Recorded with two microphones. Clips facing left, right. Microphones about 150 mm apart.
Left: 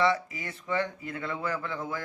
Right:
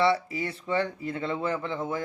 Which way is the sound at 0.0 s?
30° right (ahead or behind).